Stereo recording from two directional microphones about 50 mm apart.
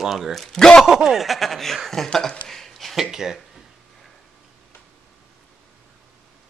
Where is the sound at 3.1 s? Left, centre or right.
Centre.